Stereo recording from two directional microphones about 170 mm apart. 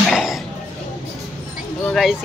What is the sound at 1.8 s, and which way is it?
Speech, centre (ahead or behind).